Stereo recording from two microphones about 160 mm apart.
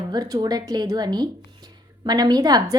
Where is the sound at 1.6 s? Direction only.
25° right (ahead or behind).